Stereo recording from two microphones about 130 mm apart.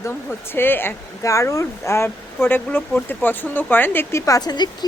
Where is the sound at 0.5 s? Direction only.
15° left (ahead or behind).